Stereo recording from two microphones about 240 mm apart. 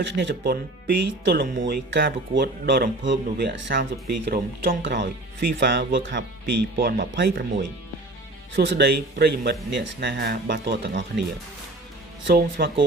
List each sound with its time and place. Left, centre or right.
0.0 s speech: right
8.5 s speech: right
12.2 s speech: right